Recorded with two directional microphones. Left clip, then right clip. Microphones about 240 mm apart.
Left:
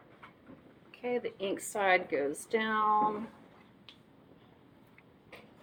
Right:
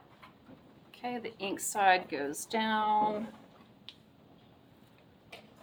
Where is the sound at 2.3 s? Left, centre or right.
Centre.